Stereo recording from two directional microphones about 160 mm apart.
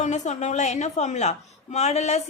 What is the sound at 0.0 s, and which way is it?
A woman's voice, 45° left (ahead or behind).